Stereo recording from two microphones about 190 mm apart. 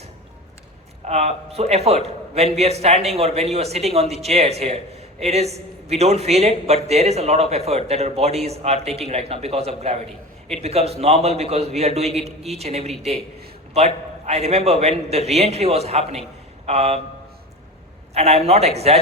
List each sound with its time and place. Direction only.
1.0 s speech: 35° right (ahead or behind)
18.1 s speech: 35° right (ahead or behind)